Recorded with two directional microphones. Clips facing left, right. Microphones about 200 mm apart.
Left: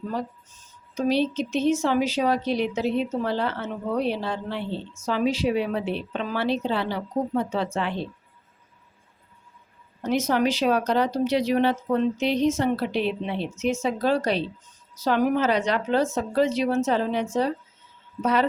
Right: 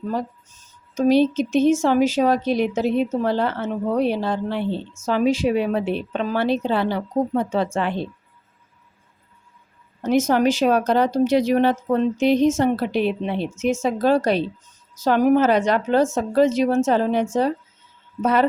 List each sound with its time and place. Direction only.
0.9 s speech: 45° right (ahead or behind)
10.0 s speech: 45° right (ahead or behind)